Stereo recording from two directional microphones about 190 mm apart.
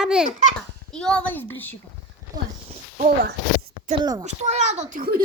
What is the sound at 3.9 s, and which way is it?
Speech, 20° right (ahead or behind).